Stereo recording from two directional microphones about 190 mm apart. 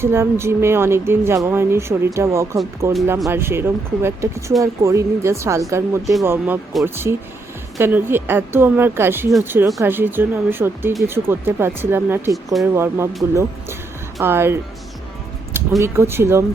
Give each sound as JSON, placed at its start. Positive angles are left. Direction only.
{"t": 0.0, "sound": "a woman's voice", "side_deg": -15}
{"t": 14.2, "sound": "a woman's voice", "side_deg": -10}
{"t": 15.8, "sound": "a woman's voice", "side_deg": -15}